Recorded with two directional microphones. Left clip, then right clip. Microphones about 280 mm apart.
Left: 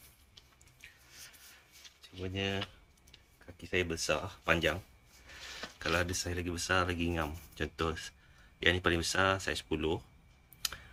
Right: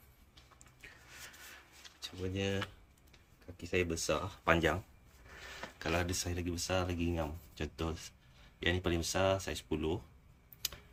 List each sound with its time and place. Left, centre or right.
2.2 s speech: centre
3.6 s speech: centre
5.8 s speech: centre